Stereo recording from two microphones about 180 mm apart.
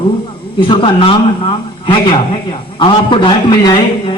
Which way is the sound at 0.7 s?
30° left (ahead or behind).